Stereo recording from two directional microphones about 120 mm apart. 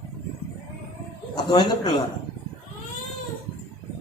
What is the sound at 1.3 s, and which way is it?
Speech, 35° left (ahead or behind).